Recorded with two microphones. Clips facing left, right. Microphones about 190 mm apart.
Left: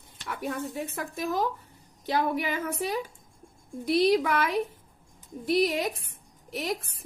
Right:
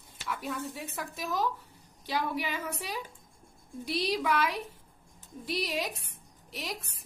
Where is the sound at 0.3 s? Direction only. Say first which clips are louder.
Left 3 dB; 55° left (ahead or behind).